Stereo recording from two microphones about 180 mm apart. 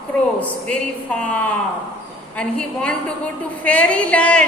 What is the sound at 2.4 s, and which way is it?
A woman's voice, 5° left (ahead or behind).